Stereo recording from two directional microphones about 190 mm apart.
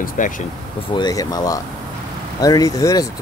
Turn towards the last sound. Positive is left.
turn(degrees=20)  # may be behind; listen again after turning